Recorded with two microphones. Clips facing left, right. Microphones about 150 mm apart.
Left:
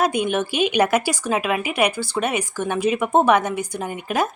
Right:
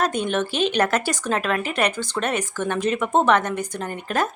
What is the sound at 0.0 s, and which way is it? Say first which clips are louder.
A woman's voice: left 2 dB; 10° left (ahead or behind).